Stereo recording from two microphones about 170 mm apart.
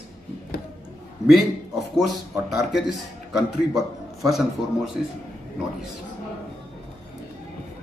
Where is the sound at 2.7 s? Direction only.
Centre (ahead or behind).